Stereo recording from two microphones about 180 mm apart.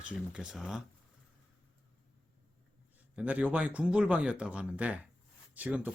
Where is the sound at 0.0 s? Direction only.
5° right (ahead or behind).